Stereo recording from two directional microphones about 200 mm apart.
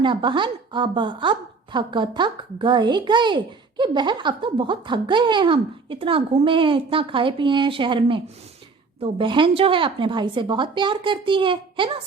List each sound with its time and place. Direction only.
0.0 s a woman's voice: 25° right (ahead or behind)